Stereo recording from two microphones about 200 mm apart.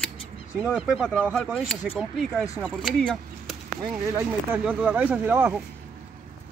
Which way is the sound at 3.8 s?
15° right (ahead or behind).